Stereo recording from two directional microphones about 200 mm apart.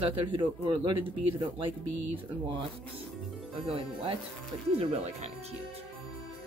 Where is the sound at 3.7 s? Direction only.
25° right (ahead or behind).